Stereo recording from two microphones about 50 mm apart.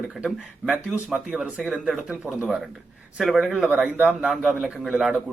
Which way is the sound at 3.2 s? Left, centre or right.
Centre.